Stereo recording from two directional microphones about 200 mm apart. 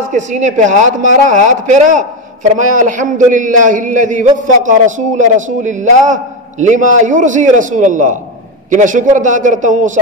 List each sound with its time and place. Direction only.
0.1 s a man's voice: 35° right (ahead or behind)